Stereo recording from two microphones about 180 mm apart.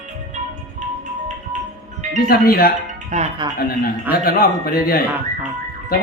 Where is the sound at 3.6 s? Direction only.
55° left (ahead or behind).